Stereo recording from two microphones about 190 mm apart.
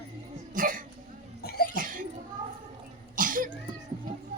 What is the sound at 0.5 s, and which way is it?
Cough, 45° right (ahead or behind).